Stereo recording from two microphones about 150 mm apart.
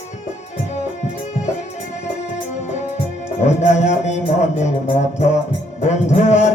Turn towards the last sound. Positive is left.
turn(degrees=50)  # may be behind; listen again after turning